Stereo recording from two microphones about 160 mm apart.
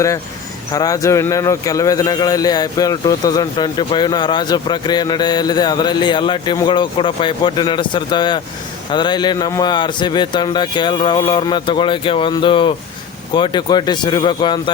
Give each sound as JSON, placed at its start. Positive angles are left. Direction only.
{"t": 0.7, "sound": "a man's voice", "side_deg": 20}